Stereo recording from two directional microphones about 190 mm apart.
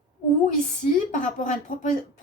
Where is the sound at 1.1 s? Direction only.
40° left (ahead or behind).